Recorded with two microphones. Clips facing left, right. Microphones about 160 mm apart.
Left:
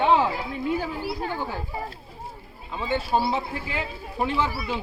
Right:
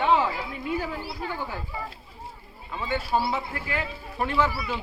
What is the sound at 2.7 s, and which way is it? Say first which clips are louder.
Speech: left 2 dB; 20° left (ahead or behind).